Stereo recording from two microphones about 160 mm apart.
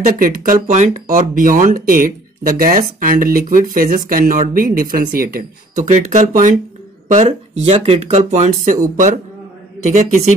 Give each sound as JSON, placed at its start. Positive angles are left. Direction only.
{"t": 0.0, "sound": "speech", "side_deg": -60}
{"t": 0.6, "sound": "speech", "side_deg": -50}
{"t": 5.9, "sound": "speech", "side_deg": -45}
{"t": 9.8, "sound": "speech", "side_deg": -50}